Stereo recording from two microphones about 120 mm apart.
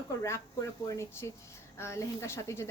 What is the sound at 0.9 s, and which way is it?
A woman's voice, 25° left (ahead or behind).